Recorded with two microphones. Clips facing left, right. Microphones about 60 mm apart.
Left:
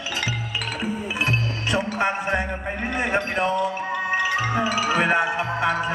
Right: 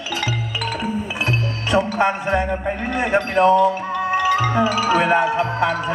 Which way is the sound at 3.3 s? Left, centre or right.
Right.